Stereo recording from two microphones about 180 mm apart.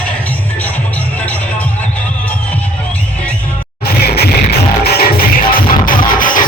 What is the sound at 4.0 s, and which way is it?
Music, 60° left (ahead or behind).